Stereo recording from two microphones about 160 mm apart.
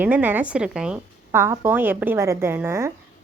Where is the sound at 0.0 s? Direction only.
10° right (ahead or behind).